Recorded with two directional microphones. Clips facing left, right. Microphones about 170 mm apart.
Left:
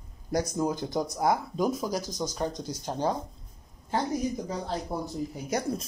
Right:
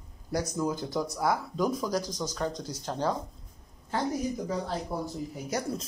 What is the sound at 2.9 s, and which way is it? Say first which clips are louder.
Speech: left 1 dB; 15° left (ahead or behind).